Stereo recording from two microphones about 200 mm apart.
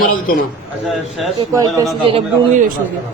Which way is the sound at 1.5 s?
15° right (ahead or behind).